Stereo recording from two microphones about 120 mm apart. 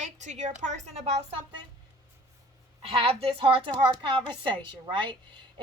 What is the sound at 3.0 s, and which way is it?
A woman's voice, 55° right (ahead or behind).